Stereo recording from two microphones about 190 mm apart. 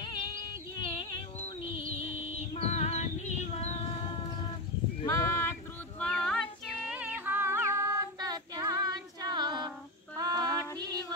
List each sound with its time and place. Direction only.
2.3 s female singing: 35° left (ahead or behind)
5.0 s female singing: 15° left (ahead or behind); by 10.6 s 20° right (ahead or behind)
10.8 s music: 20° right (ahead or behind)